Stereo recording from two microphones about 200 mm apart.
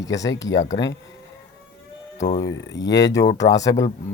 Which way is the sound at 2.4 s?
60° left (ahead or behind).